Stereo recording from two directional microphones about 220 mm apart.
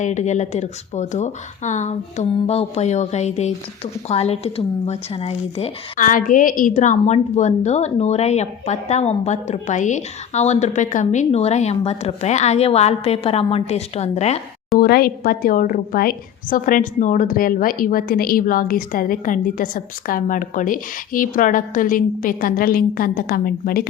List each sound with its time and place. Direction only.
0.0 s speech: 35° left (ahead or behind)
14.8 s speech: 45° left (ahead or behind)